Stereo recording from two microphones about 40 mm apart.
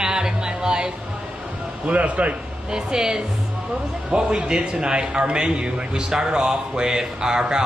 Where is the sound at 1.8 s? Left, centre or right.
Right.